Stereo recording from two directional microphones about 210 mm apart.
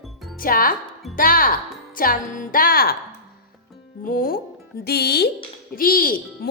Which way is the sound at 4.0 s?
45° left (ahead or behind).